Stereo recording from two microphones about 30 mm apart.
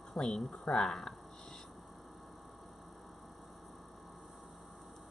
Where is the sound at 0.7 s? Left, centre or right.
Centre.